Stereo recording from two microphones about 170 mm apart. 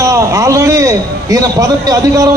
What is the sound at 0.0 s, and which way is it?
A man's voice, 20° right (ahead or behind).